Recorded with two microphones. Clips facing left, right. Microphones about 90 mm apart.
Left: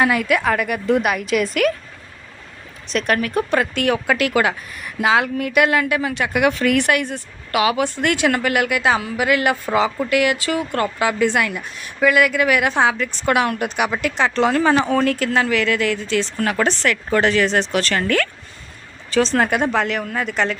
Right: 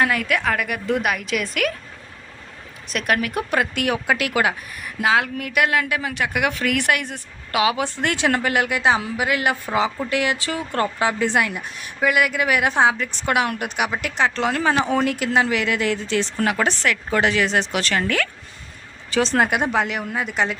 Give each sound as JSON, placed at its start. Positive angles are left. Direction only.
{"t": 0.0, "sound": "a woman's voice", "side_deg": 5}
{"t": 2.9, "sound": "speech", "side_deg": -5}
{"t": 4.9, "sound": "a woman's voice", "side_deg": 0}
{"t": 6.1, "sound": "a woman's voice", "side_deg": -10}
{"t": 14.8, "sound": "speech", "side_deg": -15}
{"t": 16.6, "sound": "speech", "side_deg": -5}